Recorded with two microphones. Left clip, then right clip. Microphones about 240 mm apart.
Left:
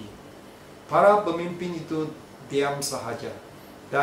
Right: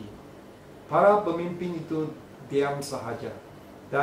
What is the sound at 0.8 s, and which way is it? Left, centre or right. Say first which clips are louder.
Speech: left 2 dB; centre.